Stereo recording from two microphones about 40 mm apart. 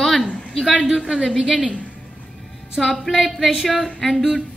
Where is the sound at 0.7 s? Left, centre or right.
Right.